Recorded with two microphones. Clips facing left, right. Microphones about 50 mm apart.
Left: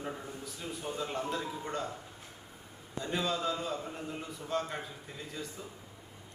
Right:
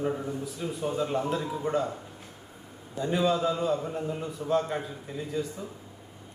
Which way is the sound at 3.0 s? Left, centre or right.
Centre.